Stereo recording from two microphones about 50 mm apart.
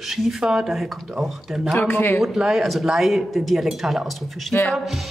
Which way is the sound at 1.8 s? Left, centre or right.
Left.